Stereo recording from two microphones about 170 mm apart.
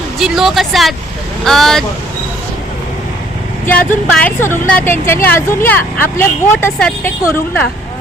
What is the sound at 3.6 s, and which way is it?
Speech, 10° left (ahead or behind).